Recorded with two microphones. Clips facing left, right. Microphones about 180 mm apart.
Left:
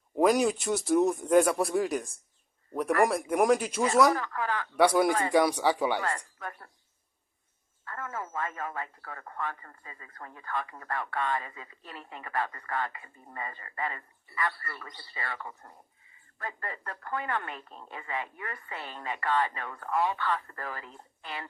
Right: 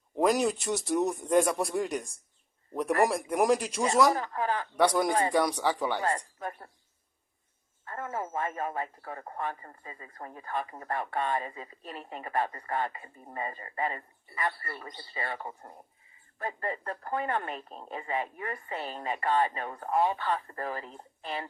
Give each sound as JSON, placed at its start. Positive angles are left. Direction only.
{"t": 0.2, "sound": "speech", "side_deg": 0}
{"t": 4.1, "sound": "speech", "side_deg": -25}
{"t": 4.8, "sound": "speech", "side_deg": 10}
{"t": 6.1, "sound": "speech", "side_deg": -25}
{"t": 7.9, "sound": "speech", "side_deg": -25}